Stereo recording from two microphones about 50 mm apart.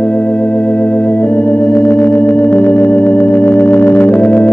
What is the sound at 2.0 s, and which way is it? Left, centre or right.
Organ, left.